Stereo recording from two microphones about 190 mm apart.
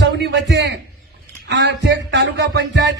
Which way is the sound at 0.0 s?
70° right (ahead or behind).